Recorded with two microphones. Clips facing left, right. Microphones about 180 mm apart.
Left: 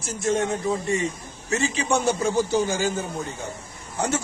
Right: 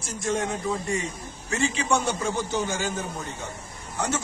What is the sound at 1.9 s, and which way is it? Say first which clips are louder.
A man's voice: left 6 dB; 30° left (ahead or behind).